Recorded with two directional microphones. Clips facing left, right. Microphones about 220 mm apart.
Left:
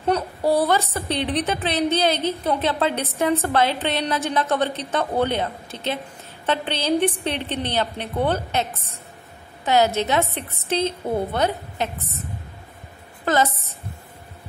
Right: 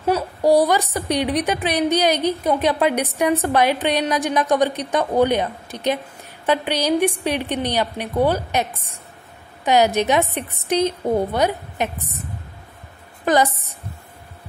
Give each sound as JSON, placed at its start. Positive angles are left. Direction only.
{"t": 0.0, "sound": "a woman's voice", "side_deg": -10}
{"t": 13.2, "sound": "a woman's voice", "side_deg": -15}